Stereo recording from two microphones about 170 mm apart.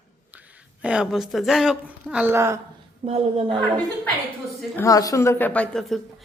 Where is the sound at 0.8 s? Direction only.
5° right (ahead or behind).